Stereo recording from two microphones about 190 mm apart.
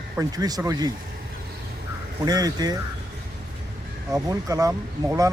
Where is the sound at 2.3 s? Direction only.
20° right (ahead or behind).